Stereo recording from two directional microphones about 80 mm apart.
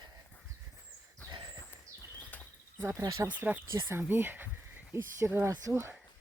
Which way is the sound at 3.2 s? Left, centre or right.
Right.